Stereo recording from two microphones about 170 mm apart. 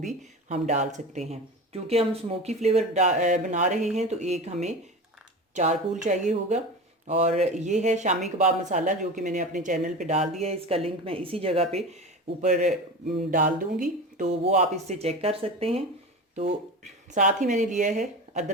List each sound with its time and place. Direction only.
0.0 s speech: 45° right (ahead or behind)
12.4 s speech: 45° right (ahead or behind)
14.2 s speech: 45° right (ahead or behind)
17.2 s speech: 50° right (ahead or behind)